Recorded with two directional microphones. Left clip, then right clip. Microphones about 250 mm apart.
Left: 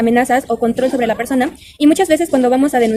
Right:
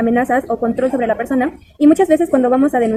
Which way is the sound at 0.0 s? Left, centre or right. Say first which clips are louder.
Left 2 dB; left.